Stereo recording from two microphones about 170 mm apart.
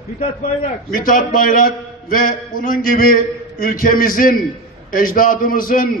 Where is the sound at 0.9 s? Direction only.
55° left (ahead or behind).